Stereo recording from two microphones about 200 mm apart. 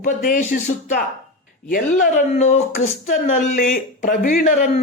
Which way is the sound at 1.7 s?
40° left (ahead or behind).